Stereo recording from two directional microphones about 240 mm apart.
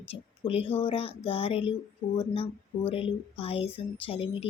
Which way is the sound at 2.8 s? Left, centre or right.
Left.